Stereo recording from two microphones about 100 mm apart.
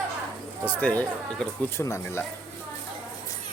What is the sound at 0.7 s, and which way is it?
Speech, 15° left (ahead or behind).